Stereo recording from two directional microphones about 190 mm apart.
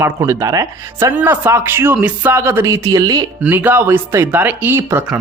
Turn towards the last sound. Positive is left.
turn(degrees=-10)  # may be behind; listen again after turning